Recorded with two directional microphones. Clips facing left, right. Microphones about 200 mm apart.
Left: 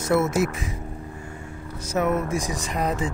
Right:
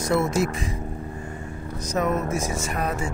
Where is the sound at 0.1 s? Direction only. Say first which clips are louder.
Left 2 dB; 10° left (ahead or behind).